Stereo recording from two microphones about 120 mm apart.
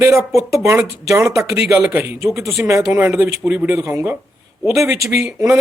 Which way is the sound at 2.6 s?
25° right (ahead or behind).